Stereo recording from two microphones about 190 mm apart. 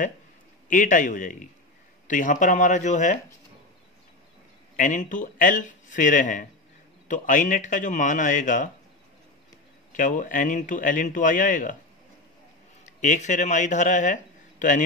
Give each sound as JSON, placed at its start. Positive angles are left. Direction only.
{"t": 0.7, "sound": "speech", "side_deg": 45}
{"t": 4.7, "sound": "speech", "side_deg": 40}
{"t": 9.9, "sound": "speech", "side_deg": 45}
{"t": 12.8, "sound": "speech", "side_deg": 40}